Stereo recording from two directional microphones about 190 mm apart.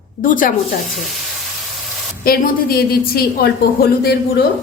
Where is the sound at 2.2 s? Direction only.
50° left (ahead or behind).